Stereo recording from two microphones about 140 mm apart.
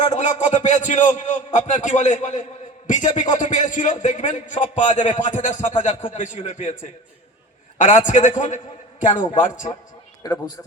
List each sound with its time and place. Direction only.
0.0 s a man's voice: 60° left (ahead or behind)